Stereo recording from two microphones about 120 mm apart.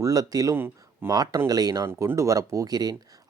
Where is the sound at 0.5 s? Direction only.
15° right (ahead or behind).